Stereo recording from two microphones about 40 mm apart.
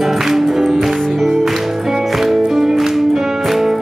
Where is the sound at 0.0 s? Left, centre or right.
Centre.